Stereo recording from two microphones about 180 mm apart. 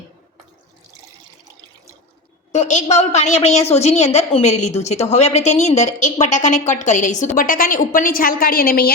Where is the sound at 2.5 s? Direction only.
40° left (ahead or behind).